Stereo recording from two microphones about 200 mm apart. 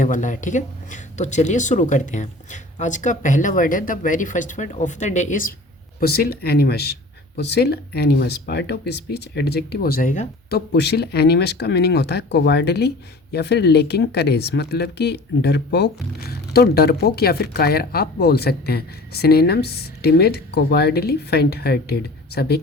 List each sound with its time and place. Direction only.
0.0 s speech: 40° left (ahead or behind)